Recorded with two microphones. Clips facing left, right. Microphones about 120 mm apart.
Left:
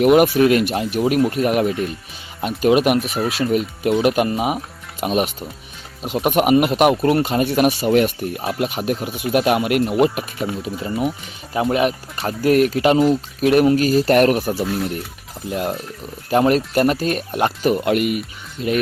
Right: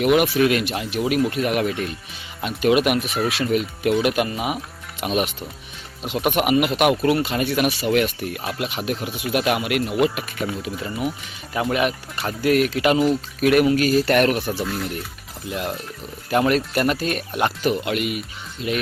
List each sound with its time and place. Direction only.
0.0 s speech: 40° left (ahead or behind)
3.0 s speech: centre (ahead or behind)
3.2 s speech: 35° left (ahead or behind); by 9.4 s 50° left (ahead or behind)
9.4 s speech: 35° left (ahead or behind)
14.6 s speech: 25° left (ahead or behind); by 18.7 s 45° left (ahead or behind)